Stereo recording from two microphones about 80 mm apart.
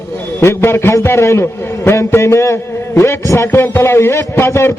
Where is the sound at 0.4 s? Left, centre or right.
Left.